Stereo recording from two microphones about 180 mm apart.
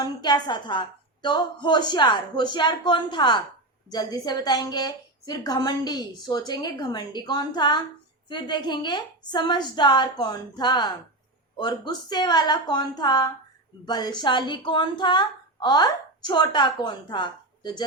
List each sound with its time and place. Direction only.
0.0 s a woman's voice: 25° left (ahead or behind)